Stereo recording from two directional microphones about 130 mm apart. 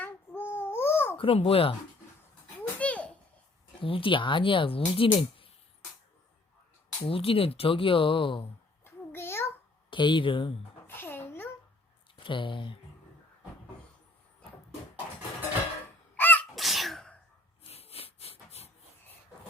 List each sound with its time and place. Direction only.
0.0 s babbling: 15° left (ahead or behind)
1.1 s a child's voice: 45° left (ahead or behind)
2.6 s a sound: 10° left (ahead or behind)
3.8 s speech: 45° left (ahead or behind)
7.1 s speech: 45° left (ahead or behind)
8.8 s a sound: 20° left (ahead or behind)
9.9 s speech: 40° left (ahead or behind)
10.8 s music: 15° left (ahead or behind)
12.1 s speech: 40° left (ahead or behind)
16.1 s sneeze: 15° left (ahead or behind)
16.6 s sneeze: centre (ahead or behind)
17.6 s rub: 50° left (ahead or behind)